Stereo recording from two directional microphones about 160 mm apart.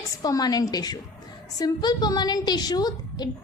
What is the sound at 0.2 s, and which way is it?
A woman's voice, 25° left (ahead or behind).